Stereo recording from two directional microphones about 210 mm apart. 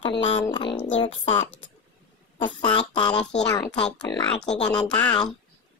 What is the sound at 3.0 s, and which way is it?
Speech, 5° left (ahead or behind).